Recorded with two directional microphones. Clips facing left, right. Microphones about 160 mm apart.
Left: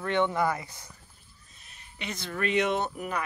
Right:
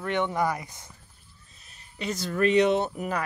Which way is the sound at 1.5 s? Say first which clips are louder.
Right 4 dB; 35° right (ahead or behind).